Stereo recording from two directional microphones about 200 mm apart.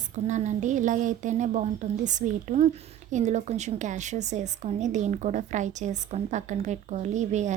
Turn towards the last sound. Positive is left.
turn(degrees=-35)  # may be behind; listen again after turning